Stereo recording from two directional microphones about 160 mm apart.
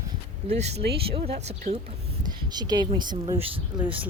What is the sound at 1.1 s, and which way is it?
Speech, 40° right (ahead or behind).